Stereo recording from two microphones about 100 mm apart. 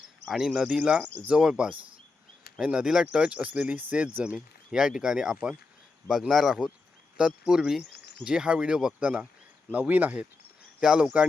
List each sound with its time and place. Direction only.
0.3 s speech: 5° right (ahead or behind)